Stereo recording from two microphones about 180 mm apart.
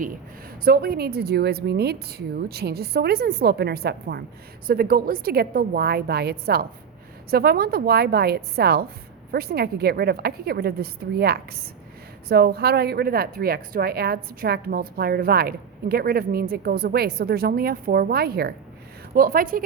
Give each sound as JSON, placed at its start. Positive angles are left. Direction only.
{"t": 0.6, "sound": "speech", "side_deg": -60}